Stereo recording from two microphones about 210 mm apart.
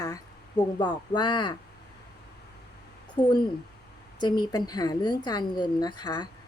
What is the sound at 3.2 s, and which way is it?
A woman's voice, 15° left (ahead or behind).